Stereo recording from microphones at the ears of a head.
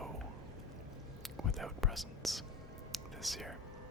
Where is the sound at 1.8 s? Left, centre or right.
Centre.